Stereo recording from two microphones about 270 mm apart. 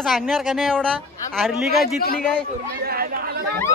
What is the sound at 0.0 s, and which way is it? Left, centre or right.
Speech, centre.